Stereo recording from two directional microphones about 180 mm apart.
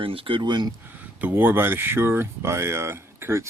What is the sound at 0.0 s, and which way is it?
Speech, 30° right (ahead or behind).